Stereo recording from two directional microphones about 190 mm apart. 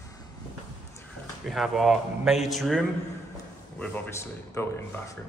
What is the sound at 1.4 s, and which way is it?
A man's voice, centre (ahead or behind).